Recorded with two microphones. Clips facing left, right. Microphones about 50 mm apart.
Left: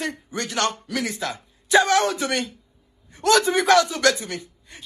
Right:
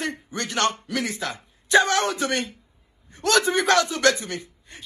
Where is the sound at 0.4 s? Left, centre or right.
Right.